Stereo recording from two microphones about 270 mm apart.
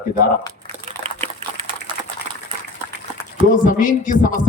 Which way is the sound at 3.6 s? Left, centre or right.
Left.